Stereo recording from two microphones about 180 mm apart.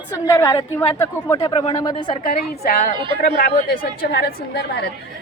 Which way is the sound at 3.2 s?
50° left (ahead or behind).